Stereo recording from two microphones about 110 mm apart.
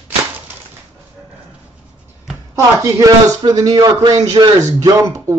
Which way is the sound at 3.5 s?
35° right (ahead or behind).